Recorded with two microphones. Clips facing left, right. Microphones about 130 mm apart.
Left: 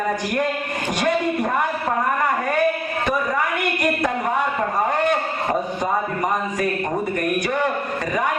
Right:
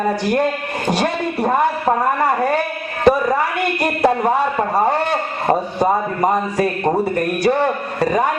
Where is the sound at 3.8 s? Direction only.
30° right (ahead or behind).